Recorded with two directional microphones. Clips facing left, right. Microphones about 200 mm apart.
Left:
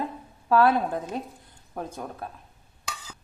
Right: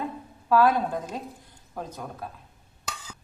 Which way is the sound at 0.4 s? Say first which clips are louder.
Even; 25° left (ahead or behind).